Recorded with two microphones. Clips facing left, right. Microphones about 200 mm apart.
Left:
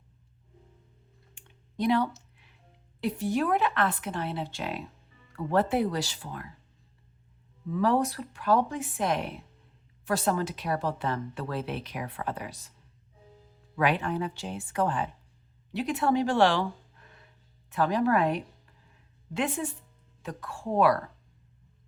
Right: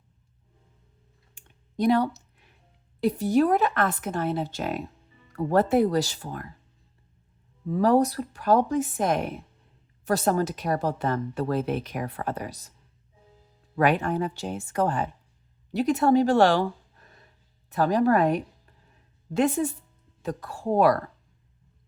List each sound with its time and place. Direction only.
1.4 s a sound: 40° right (ahead or behind)
3.0 s speech: 40° right (ahead or behind)
7.7 s speech: 40° right (ahead or behind)
13.7 s speech: 45° right (ahead or behind)